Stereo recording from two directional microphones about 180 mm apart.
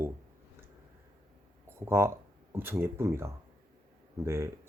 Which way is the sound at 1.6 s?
15° right (ahead or behind).